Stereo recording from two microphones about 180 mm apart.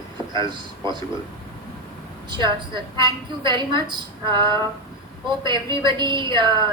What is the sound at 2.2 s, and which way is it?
A woman's voice, 25° right (ahead or behind).